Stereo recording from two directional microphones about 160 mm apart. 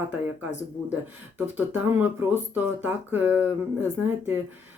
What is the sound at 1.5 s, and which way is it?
Speech, 10° right (ahead or behind).